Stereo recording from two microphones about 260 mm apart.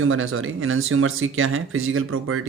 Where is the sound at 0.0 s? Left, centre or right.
Right.